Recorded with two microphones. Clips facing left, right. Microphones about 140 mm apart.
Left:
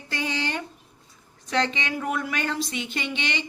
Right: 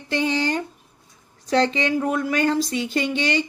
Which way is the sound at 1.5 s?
35° right (ahead or behind).